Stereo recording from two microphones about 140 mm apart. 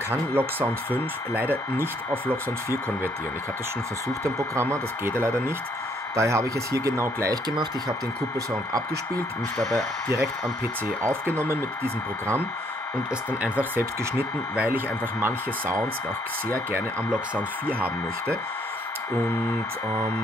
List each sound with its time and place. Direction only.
0.1 s speech: 15° right (ahead or behind)
4.2 s speech: 20° right (ahead or behind)
9.8 s speech: 25° right (ahead or behind)